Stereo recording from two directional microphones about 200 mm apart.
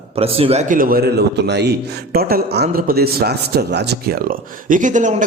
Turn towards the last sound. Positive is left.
turn(degrees=-40)  # may be behind; listen again after turning